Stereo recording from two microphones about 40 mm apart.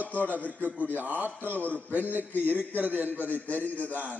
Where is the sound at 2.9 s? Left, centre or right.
Right.